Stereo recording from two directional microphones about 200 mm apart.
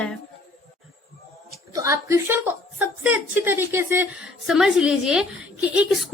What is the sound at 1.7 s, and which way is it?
A woman's voice, 15° right (ahead or behind).